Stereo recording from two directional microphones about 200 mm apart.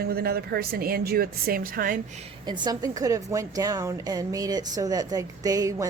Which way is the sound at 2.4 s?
20° right (ahead or behind).